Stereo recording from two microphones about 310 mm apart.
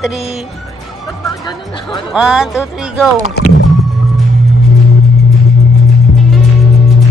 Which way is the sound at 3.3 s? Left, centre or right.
Left.